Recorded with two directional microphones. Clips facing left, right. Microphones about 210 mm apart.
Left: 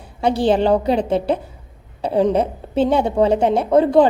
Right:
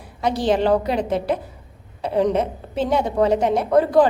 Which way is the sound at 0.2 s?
30° left (ahead or behind).